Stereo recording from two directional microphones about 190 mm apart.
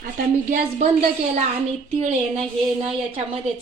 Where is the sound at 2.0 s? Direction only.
35° right (ahead or behind).